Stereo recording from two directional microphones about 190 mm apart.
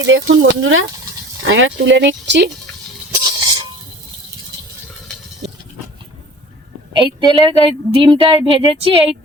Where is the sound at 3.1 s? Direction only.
20° right (ahead or behind).